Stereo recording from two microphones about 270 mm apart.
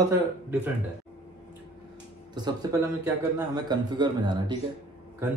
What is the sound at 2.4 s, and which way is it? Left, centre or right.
Speech, centre.